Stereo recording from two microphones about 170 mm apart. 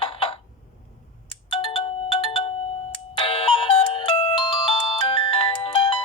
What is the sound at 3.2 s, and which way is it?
Music, 30° left (ahead or behind).